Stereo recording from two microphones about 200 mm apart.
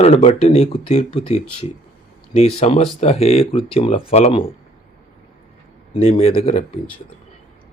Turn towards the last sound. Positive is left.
turn(degrees=35)  # may be behind; listen again after turning